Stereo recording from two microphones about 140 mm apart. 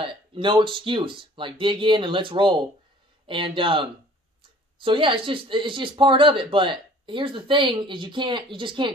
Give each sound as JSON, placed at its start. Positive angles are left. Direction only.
{"t": 0.0, "sound": "speech", "side_deg": -40}